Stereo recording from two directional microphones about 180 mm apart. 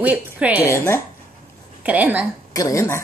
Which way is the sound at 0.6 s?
15° left (ahead or behind).